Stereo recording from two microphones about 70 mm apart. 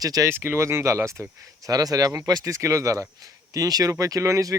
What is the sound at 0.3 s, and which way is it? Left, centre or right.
Speech, right.